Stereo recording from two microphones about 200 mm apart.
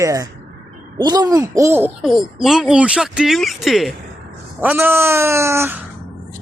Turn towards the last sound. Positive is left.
turn(degrees=-10)  # may be behind; listen again after turning